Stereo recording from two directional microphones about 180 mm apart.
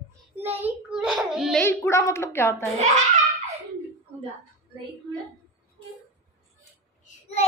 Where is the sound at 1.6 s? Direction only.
15° left (ahead or behind).